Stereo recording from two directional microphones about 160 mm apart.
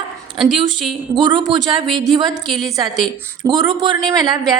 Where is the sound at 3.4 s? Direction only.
25° right (ahead or behind).